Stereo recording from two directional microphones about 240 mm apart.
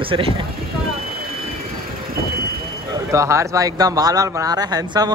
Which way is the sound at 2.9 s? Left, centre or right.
Centre.